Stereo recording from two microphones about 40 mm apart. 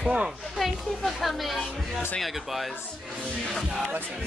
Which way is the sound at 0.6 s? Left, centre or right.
Centre.